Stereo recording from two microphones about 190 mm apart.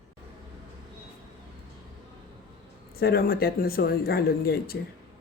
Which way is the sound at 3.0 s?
55° left (ahead or behind).